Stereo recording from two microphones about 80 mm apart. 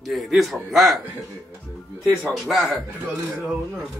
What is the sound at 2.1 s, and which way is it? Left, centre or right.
Speech, centre.